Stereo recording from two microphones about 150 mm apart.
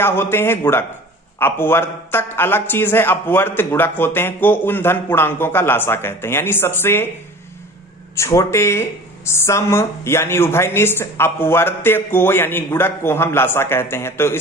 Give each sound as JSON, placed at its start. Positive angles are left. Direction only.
{"t": 0.0, "sound": "speech", "side_deg": 15}
{"t": 8.2, "sound": "speech", "side_deg": 20}